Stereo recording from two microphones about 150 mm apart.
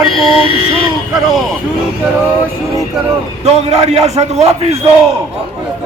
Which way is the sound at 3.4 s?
45° right (ahead or behind).